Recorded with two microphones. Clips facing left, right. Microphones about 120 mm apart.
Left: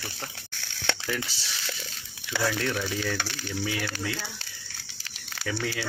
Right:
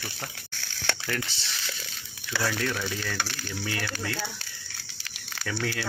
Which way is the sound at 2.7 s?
15° left (ahead or behind).